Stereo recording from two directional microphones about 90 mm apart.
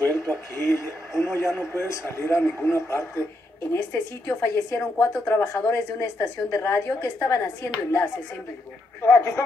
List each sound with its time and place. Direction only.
0.0 s a man's voice: 20° left (ahead or behind)
9.0 s a woman's voice: 25° left (ahead or behind)